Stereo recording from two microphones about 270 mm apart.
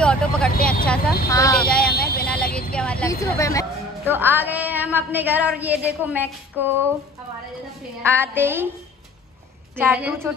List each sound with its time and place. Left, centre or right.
0.0 s vehicle: centre
1.9 s vehicle: left
2.2 s vehicle: centre
2.7 s a sound: centre
4.1 s a woman's voice: centre
8.0 s a woman's voice: centre
9.8 s a woman's voice: centre